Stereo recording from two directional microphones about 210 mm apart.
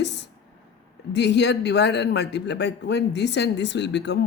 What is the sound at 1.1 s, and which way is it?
A man's voice, 55° left (ahead or behind).